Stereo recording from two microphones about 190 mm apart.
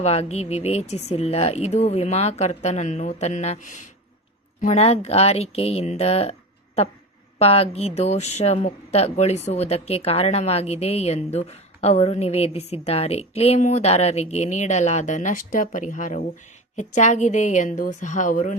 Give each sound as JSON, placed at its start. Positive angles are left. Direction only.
{"t": 0.0, "sound": "speech", "side_deg": 35}
{"t": 7.3, "sound": "speech", "side_deg": 30}